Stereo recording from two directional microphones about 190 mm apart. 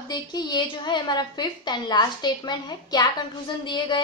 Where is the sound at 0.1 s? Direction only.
20° left (ahead or behind).